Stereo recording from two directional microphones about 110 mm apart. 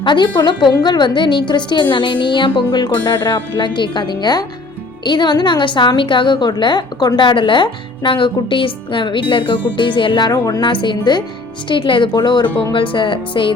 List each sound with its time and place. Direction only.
0.0 s a woman's voice: 45° left (ahead or behind)